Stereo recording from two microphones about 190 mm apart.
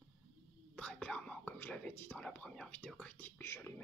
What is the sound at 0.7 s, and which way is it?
Speech, 5° left (ahead or behind).